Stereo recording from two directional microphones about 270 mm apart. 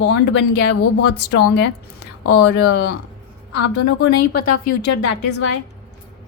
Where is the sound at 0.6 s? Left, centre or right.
Left.